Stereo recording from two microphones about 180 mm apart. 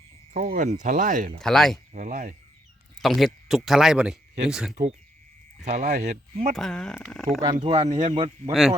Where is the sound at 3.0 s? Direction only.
Centre (ahead or behind).